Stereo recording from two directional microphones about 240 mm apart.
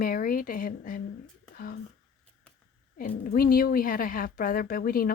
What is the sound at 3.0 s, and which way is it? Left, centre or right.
Speech, left.